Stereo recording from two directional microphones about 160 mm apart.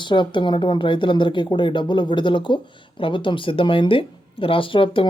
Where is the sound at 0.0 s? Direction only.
30° left (ahead or behind).